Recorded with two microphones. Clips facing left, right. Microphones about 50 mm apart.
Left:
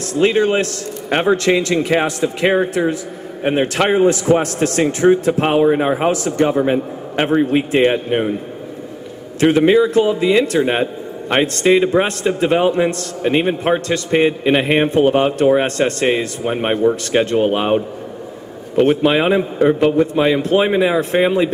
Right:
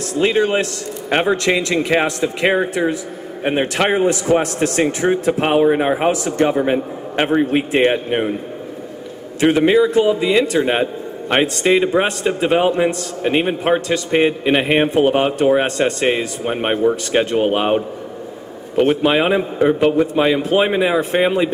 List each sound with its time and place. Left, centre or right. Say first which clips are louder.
0.2 s a man's voice: left 2 dB; centre
3.9 s a man's voice: left 3 dB; centre
9.4 s a man's voice: left 1 dB; centre
10.0 s a man's voice: left 1 dB; centre
10.4 s a man's voice: even; centre